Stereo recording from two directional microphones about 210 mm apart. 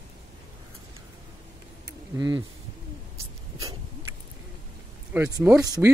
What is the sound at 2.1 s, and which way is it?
Speech, 20° right (ahead or behind).